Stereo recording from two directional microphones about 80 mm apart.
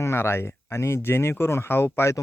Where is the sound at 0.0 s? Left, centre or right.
Left.